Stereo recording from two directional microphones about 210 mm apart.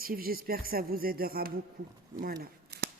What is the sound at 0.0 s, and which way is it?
Speech, 45° right (ahead or behind).